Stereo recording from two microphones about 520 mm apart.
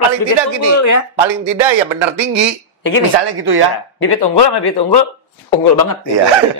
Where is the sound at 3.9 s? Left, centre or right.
Left.